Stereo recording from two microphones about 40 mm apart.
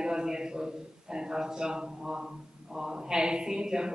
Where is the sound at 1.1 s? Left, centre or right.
Centre.